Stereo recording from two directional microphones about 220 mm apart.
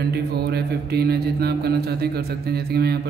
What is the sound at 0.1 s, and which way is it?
Mantra, 45° right (ahead or behind).